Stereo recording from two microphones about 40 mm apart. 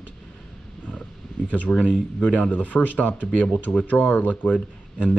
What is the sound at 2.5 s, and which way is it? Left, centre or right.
Speech, left.